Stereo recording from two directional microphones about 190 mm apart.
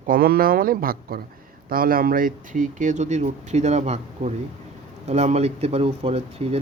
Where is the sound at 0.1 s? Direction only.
50° right (ahead or behind).